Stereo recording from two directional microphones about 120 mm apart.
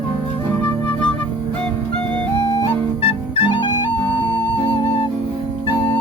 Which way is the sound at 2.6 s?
40° left (ahead or behind).